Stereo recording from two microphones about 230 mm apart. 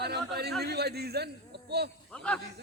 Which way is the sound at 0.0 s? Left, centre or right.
Right.